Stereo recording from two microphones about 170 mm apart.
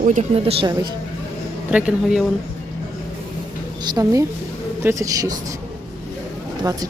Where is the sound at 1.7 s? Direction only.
5° right (ahead or behind).